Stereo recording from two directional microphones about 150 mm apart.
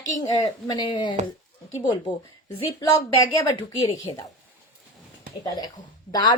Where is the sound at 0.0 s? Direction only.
25° left (ahead or behind).